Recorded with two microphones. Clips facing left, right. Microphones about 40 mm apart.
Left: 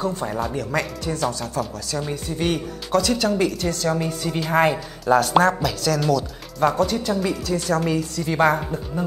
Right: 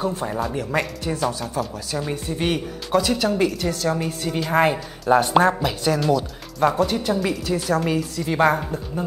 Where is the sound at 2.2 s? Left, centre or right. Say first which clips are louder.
Left 1 dB; right; by 4.6 s centre.